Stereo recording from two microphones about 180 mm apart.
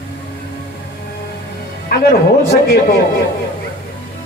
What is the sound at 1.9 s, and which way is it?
A man's voice, 60° left (ahead or behind).